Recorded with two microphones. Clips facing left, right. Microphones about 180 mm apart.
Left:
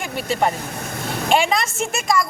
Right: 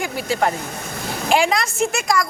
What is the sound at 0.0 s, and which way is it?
A woman's voice, 5° right (ahead or behind).